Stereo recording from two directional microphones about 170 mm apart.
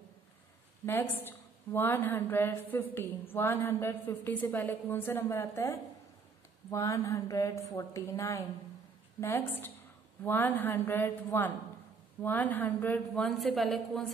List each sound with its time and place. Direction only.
1.2 s a woman's voice: 10° left (ahead or behind)